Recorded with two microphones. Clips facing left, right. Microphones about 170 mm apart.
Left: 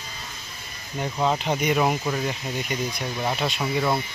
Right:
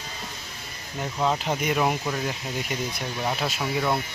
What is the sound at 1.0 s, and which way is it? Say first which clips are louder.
Speech: left 1 dB; 5° left (ahead or behind).